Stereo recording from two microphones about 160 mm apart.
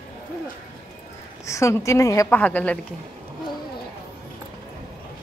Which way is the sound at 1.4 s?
20° left (ahead or behind).